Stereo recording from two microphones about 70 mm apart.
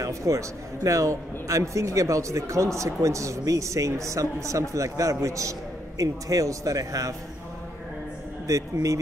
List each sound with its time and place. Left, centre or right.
0.0 s a man's voice: right
8.5 s a man's voice: right